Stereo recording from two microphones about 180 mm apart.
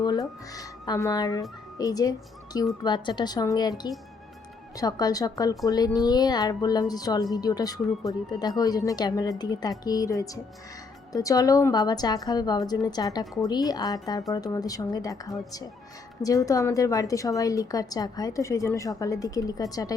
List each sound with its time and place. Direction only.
0.0 s a woman's voice: 20° left (ahead or behind)